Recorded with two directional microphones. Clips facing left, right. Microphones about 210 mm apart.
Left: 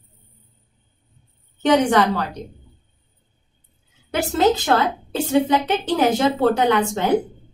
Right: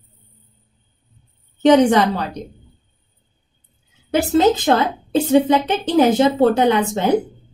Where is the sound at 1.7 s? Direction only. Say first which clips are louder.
Right 4 dB; 20° right (ahead or behind).